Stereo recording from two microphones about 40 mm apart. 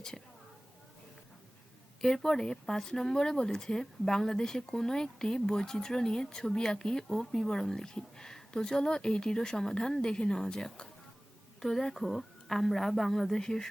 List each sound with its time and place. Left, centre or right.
0.1 s a woman's voice: centre
2.0 s speech: centre